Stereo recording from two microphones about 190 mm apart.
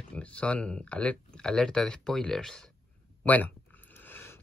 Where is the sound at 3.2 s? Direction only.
10° left (ahead or behind).